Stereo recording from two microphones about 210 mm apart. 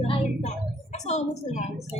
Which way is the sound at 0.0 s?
30° left (ahead or behind).